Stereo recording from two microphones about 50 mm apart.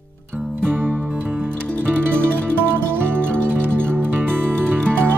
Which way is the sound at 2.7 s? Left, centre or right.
Right.